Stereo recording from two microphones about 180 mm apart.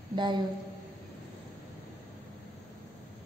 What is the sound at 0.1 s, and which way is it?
Speech, 25° right (ahead or behind).